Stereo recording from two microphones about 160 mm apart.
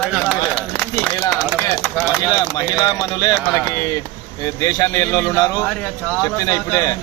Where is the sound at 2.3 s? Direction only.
25° left (ahead or behind).